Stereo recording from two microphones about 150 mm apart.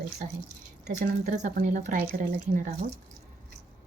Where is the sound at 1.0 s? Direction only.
50° right (ahead or behind).